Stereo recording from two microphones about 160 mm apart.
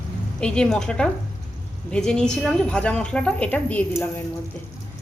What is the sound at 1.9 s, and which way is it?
A woman's voice, 5° left (ahead or behind).